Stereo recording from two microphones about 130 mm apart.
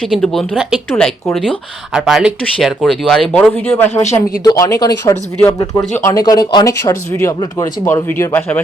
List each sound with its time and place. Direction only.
0.0 s speech: centre (ahead or behind)
3.5 s speech: 15° left (ahead or behind)